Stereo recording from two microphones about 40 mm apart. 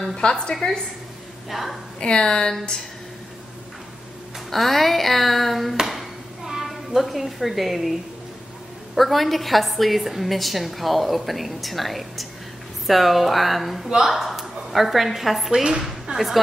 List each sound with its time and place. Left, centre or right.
0.0 s a woman's voice: centre
1.5 s a woman's voice: centre
2.0 s a woman's voice: left
4.5 s a woman's voice: centre
5.9 s a sound: centre
8.9 s a woman's voice: centre
16.1 s speech: right